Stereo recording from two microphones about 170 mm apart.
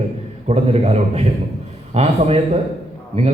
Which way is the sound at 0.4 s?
35° right (ahead or behind).